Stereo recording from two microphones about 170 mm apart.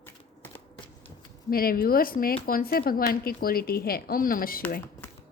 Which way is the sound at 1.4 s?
60° left (ahead or behind).